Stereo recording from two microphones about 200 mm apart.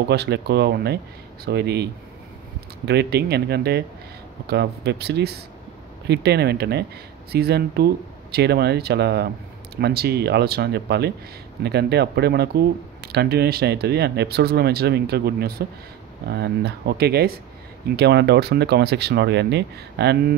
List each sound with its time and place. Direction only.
0.1 s speech: 55° right (ahead or behind)